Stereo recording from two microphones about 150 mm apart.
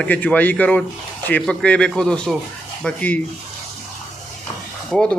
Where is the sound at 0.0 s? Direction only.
10° left (ahead or behind).